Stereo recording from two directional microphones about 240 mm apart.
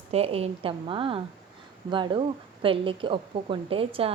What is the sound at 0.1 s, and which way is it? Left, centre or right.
Speech, right.